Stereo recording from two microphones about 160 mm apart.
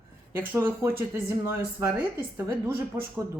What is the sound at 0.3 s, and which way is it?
Speech, 15° right (ahead or behind).